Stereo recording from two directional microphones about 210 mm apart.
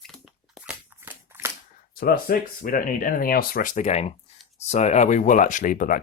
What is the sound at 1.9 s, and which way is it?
Speech, 45° left (ahead or behind).